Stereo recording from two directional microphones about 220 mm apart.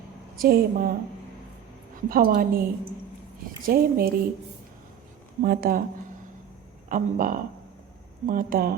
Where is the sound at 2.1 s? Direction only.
40° right (ahead or behind).